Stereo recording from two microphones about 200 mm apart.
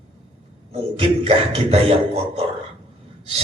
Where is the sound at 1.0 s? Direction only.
30° right (ahead or behind).